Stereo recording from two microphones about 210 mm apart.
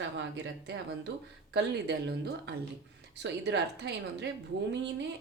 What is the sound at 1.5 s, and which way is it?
A woman's voice, 55° right (ahead or behind).